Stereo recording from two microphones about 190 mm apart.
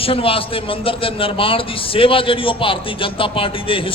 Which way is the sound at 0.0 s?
30° left (ahead or behind).